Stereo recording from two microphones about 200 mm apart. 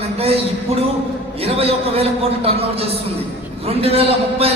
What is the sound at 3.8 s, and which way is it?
Speech, 30° right (ahead or behind).